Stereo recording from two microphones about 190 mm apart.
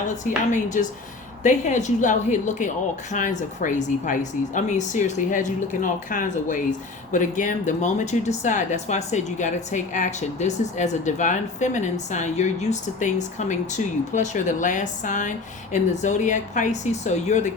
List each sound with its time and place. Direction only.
0.3 s a woman's voice: 40° left (ahead or behind)